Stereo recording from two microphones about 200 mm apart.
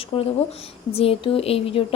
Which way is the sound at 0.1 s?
30° left (ahead or behind).